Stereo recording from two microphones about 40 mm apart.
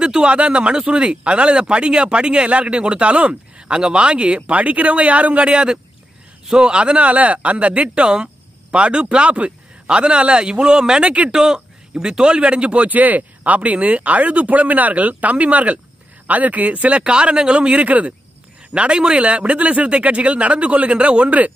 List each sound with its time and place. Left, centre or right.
0.0 s speech: right
4.5 s speech: right
5.5 s speech: right
11.0 s speech: right
11.3 s speech: centre; by 21.5 s right